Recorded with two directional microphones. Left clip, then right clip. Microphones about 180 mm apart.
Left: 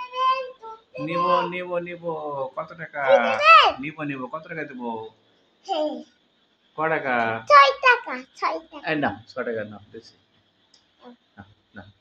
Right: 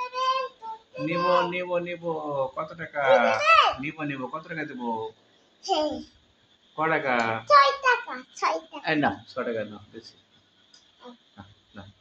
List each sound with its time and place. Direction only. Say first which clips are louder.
0.9 s a man's voice: left 2 dB; 15° left (ahead or behind)
3.3 s speech: left 5 dB; 30° left (ahead or behind)
3.8 s a man's voice: left 1 dB; 15° left (ahead or behind)
7.4 s a sound: left 5 dB; 40° left (ahead or behind)
8.4 s a man's voice: right 1 dB; 10° left (ahead or behind)